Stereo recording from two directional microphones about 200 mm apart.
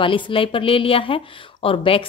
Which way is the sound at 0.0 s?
25° left (ahead or behind).